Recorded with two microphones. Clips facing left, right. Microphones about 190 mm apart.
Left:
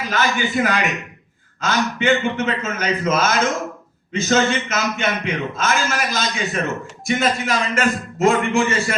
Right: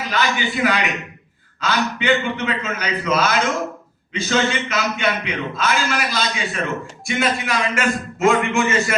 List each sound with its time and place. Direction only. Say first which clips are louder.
0.1 s a man's voice: left 1 dB; 45° left (ahead or behind)